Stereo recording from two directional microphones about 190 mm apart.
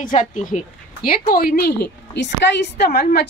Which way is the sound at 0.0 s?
40° left (ahead or behind).